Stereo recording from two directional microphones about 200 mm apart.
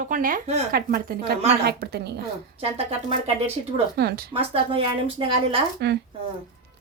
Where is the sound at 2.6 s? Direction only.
30° right (ahead or behind).